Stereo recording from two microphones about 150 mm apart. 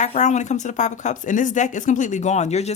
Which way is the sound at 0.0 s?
50° left (ahead or behind).